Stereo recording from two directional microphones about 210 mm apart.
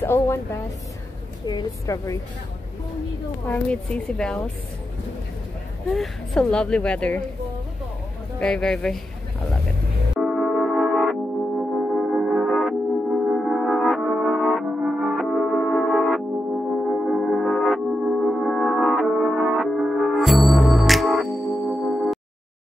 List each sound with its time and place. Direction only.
0.0 s a woman's voice: 10° left (ahead or behind)
3.4 s speech: 5° left (ahead or behind)
5.9 s speech: 5° left (ahead or behind)
8.4 s speech: 5° left (ahead or behind)
10.1 s music: centre (ahead or behind)